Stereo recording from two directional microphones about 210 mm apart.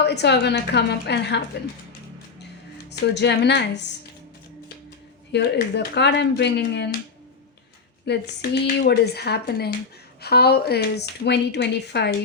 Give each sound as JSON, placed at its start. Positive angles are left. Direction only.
{"t": 0.0, "sound": "a woman's voice", "side_deg": 55}
{"t": 2.9, "sound": "speech", "side_deg": 55}
{"t": 5.3, "sound": "a woman's voice", "side_deg": 55}
{"t": 8.0, "sound": "a woman's voice", "side_deg": 55}